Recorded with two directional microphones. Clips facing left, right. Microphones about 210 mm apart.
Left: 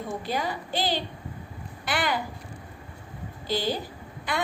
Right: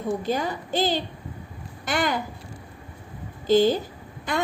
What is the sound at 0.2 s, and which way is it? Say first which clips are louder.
A woman's voice: right 4 dB; 45° right (ahead or behind).